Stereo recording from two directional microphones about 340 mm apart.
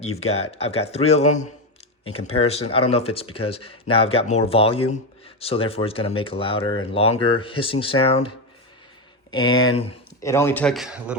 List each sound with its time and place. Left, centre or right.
0.0 s speech: centre
9.3 s speech: centre